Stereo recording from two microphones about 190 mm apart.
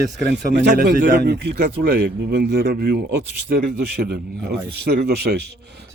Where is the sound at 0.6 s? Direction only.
60° right (ahead or behind).